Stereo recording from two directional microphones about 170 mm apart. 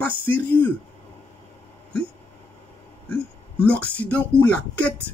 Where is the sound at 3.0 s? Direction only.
10° left (ahead or behind).